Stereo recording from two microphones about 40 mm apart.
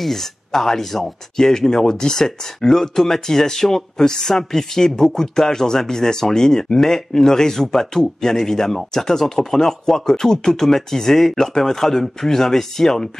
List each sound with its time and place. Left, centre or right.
0.0 s speech: centre